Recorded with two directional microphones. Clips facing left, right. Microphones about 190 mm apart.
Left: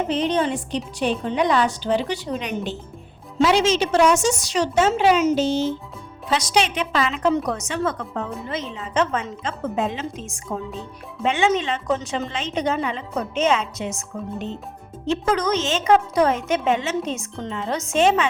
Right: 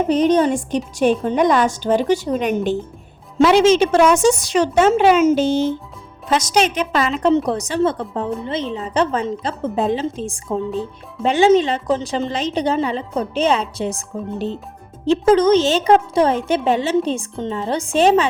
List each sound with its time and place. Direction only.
0.1 s a woman's voice: 45° right (ahead or behind)